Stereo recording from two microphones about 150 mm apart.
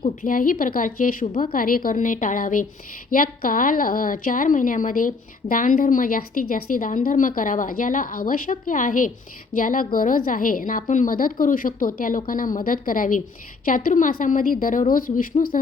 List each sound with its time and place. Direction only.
0.0 s a woman's voice: 60° left (ahead or behind)